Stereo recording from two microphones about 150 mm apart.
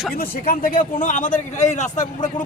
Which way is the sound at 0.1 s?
70° left (ahead or behind).